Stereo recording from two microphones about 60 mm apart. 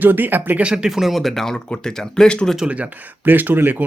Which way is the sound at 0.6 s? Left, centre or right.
Centre.